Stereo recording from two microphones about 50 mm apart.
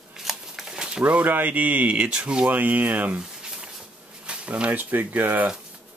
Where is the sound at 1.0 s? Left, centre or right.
Right.